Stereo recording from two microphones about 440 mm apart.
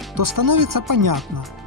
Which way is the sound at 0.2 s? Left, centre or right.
Right.